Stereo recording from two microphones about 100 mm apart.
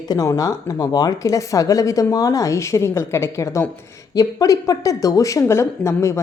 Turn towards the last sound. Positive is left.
turn(degrees=30)  # may be behind; listen again after turning